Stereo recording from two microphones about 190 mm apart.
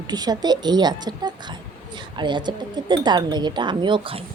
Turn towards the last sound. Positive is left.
turn(degrees=-25)  # may be behind; listen again after turning